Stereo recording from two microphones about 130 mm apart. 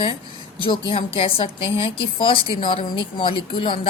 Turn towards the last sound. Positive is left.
turn(degrees=40)  # may be behind; listen again after turning